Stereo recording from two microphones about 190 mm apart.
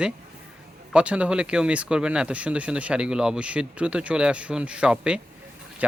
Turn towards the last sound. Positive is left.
turn(degrees=-5)  # may be behind; listen again after turning